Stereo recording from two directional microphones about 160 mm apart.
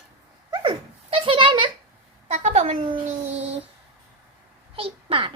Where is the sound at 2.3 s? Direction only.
45° right (ahead or behind).